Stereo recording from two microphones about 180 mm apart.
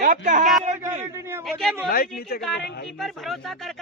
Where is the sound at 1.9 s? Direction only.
55° left (ahead or behind).